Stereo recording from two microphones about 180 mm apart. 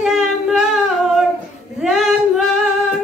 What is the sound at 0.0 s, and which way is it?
Humming, centre (ahead or behind).